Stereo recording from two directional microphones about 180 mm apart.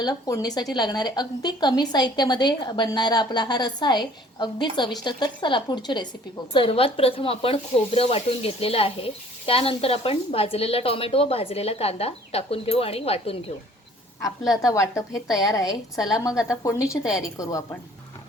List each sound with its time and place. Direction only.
0.0 s speech: 20° left (ahead or behind)
14.2 s a woman's voice: 20° left (ahead or behind)